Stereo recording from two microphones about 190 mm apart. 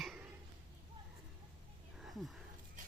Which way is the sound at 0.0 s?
Centre (ahead or behind).